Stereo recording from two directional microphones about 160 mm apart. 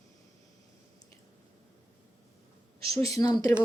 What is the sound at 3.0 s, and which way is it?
Speech, 20° left (ahead or behind).